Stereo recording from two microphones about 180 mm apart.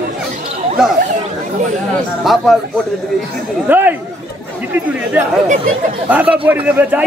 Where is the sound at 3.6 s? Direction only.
10° right (ahead or behind).